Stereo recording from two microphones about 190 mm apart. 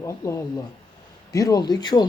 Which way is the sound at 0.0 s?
15° left (ahead or behind).